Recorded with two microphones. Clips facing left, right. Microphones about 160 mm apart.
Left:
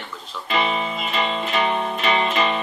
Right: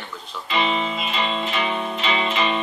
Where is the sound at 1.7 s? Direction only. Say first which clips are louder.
Left 2 dB; 50° left (ahead or behind).